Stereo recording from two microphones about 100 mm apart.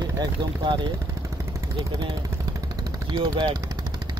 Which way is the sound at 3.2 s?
55° right (ahead or behind).